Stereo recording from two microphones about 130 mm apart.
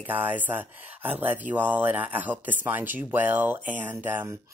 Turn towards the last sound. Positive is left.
turn(degrees=-15)  # may be behind; listen again after turning